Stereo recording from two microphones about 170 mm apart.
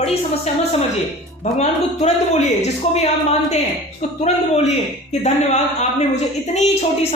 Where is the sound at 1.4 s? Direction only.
40° left (ahead or behind).